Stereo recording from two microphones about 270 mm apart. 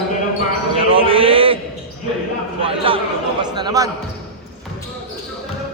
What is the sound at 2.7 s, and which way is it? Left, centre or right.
A man's voice, centre.